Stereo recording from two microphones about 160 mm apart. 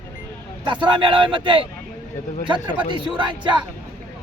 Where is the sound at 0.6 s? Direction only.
30° right (ahead or behind).